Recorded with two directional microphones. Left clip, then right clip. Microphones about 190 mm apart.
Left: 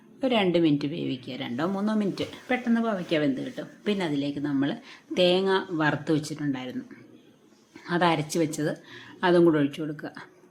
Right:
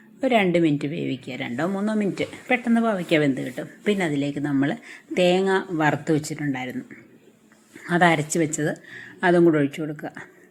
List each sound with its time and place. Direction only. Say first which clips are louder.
0.2 s a woman's voice: right 4 dB; 10° right (ahead or behind)
7.9 s a woman's voice: right 5 dB; 15° right (ahead or behind)